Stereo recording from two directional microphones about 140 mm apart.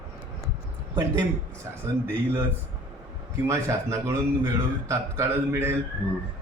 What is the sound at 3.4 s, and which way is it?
A man's voice, 20° right (ahead or behind).